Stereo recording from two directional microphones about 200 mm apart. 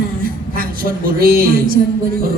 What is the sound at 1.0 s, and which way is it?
Speech, 45° right (ahead or behind).